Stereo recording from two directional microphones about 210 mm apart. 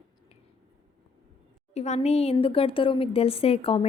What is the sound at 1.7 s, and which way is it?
A woman's voice, 30° left (ahead or behind).